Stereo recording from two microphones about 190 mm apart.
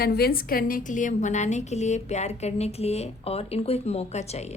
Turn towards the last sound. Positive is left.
turn(degrees=35)  # may be behind; listen again after turning